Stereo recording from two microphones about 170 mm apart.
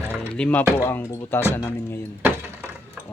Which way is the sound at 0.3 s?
10° left (ahead or behind).